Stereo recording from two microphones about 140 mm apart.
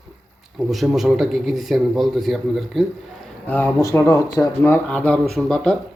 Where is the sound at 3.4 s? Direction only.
15° left (ahead or behind).